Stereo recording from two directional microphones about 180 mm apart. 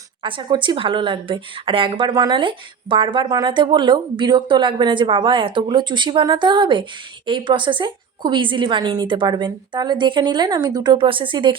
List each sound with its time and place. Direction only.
0.2 s a woman's voice: 30° right (ahead or behind)